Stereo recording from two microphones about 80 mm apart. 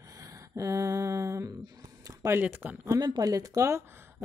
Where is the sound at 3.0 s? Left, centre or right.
Right.